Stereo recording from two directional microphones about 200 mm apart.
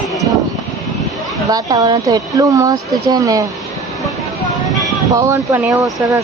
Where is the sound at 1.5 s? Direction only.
20° right (ahead or behind).